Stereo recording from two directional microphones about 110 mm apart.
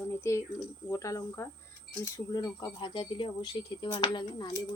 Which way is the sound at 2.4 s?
40° left (ahead or behind).